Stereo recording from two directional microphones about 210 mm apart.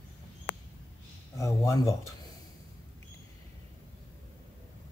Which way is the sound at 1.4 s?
15° left (ahead or behind).